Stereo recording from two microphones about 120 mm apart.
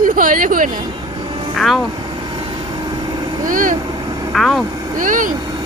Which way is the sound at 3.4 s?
90° right.